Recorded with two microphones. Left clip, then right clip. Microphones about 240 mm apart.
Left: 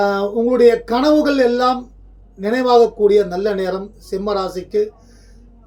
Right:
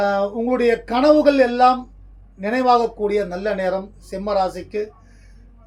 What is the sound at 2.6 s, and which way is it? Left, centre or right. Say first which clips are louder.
Speech: left 4 dB; centre.